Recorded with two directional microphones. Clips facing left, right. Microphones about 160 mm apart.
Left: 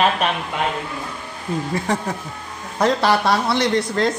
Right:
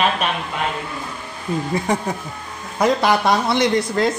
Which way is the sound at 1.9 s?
10° right (ahead or behind).